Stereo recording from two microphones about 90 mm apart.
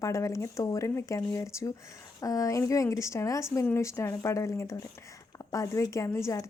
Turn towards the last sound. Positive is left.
turn(degrees=30)  # may be behind; listen again after turning